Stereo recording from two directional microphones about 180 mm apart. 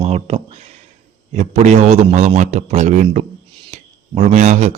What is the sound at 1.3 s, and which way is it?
Speech, 40° right (ahead or behind).